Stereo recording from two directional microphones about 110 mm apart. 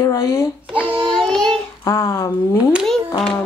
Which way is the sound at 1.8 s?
25° left (ahead or behind).